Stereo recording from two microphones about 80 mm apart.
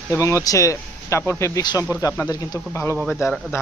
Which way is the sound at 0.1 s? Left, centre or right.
Left.